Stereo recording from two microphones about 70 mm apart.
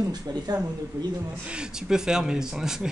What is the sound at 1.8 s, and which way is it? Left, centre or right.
Speech, centre.